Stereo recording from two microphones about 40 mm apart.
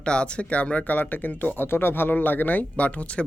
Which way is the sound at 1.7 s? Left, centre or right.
Left.